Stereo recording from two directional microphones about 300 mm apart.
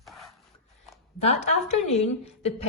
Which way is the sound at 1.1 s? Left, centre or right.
Left.